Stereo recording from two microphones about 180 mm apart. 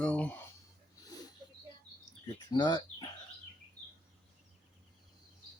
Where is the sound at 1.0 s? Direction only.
20° left (ahead or behind).